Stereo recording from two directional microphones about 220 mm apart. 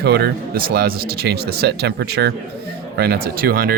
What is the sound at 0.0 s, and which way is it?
Speech, 45° right (ahead or behind).